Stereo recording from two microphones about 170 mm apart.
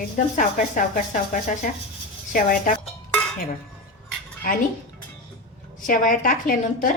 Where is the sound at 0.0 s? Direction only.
50° left (ahead or behind).